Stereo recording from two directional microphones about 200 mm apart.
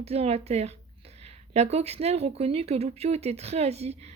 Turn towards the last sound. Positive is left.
turn(degrees=-30)  # may be behind; listen again after turning